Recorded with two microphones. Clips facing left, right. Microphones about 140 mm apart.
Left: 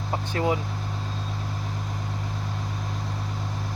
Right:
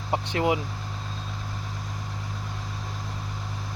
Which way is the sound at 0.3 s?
10° right (ahead or behind).